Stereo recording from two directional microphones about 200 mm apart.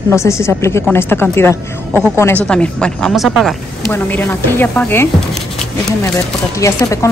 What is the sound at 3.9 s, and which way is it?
Speech, 10° left (ahead or behind).